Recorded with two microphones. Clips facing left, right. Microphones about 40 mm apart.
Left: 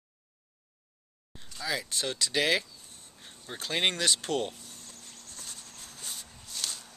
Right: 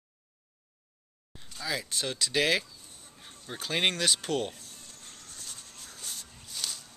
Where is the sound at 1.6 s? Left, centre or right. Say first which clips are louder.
Left 1 dB; centre.